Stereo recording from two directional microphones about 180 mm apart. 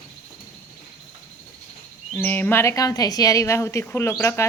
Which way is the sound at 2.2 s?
10° left (ahead or behind).